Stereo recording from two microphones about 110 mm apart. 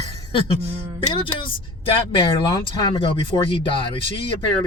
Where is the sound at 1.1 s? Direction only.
50° left (ahead or behind).